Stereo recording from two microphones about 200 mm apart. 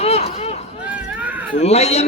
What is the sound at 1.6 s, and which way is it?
Speech, 30° left (ahead or behind).